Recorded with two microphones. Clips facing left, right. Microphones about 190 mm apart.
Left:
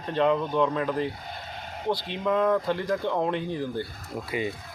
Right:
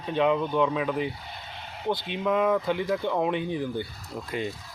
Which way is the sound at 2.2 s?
5° right (ahead or behind).